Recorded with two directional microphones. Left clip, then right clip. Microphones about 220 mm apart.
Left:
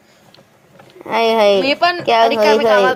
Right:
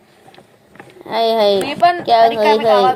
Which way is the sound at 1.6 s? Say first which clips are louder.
Right 1 dB; 30° left (ahead or behind).